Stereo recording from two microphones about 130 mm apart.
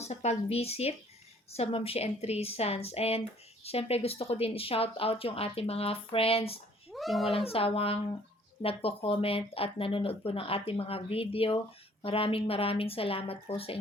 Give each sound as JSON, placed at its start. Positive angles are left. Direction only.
{"t": 0.0, "sound": "a woman's voice", "side_deg": 55}
{"t": 6.9, "sound": "a child's voice", "side_deg": 0}
{"t": 7.3, "sound": "a woman's voice", "side_deg": 45}